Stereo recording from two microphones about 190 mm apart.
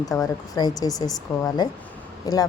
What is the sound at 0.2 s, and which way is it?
A woman's voice, 20° left (ahead or behind).